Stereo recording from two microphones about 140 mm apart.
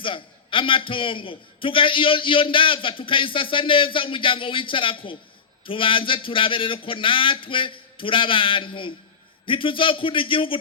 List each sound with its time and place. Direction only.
0.0 s a man's voice: 40° left (ahead or behind)